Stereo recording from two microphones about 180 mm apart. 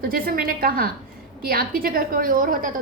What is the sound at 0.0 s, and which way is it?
A woman's voice, 55° right (ahead or behind).